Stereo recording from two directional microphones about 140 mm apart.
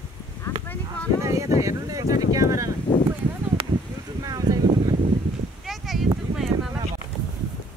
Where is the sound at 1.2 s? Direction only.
20° right (ahead or behind).